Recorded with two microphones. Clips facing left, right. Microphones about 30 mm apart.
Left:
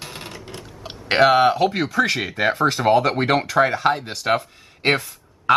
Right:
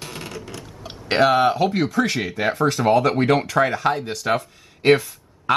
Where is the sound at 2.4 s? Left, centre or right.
Left.